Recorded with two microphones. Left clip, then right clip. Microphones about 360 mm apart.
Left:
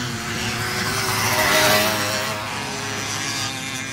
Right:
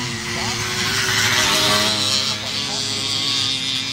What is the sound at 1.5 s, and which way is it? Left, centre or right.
Music, left.